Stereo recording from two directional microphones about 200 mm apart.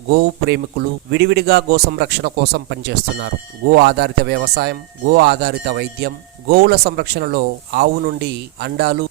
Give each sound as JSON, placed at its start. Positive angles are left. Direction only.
{"t": 0.1, "sound": "a man's voice", "side_deg": -55}